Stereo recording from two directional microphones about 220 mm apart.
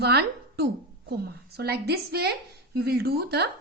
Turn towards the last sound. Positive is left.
turn(degrees=-45)  # may be behind; listen again after turning